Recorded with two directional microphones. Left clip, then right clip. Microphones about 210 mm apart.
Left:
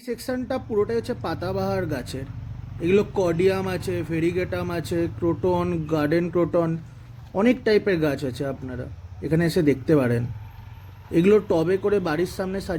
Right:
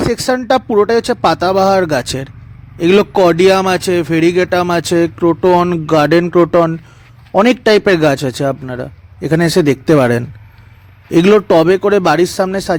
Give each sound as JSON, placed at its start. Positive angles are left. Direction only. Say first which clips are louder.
{"t": 0.1, "sound": "a man's voice", "louder": "right 11 dB", "side_deg": -45}